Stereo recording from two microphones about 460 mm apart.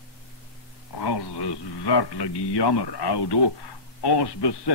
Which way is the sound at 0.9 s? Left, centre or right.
Left.